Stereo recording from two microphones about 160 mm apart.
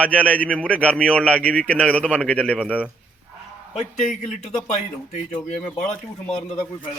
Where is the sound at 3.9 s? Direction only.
50° left (ahead or behind).